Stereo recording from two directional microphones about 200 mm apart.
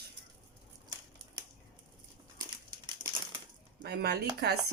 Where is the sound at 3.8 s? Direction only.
55° right (ahead or behind).